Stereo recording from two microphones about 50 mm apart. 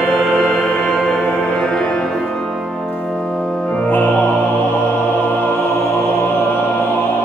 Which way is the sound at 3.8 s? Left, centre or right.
Left.